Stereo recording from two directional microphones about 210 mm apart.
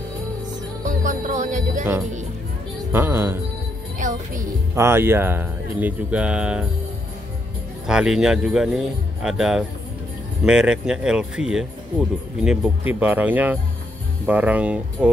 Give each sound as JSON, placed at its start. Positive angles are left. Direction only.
{"t": 0.8, "sound": "music", "side_deg": -40}
{"t": 2.9, "sound": "speech", "side_deg": -10}
{"t": 4.0, "sound": "speech", "side_deg": -40}
{"t": 4.7, "sound": "speech", "side_deg": -10}
{"t": 7.8, "sound": "speech", "side_deg": -5}